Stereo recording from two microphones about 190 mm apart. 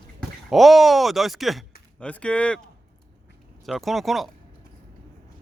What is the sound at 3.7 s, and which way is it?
Speech, centre (ahead or behind).